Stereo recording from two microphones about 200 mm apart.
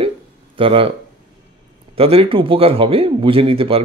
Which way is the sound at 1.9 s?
30° right (ahead or behind).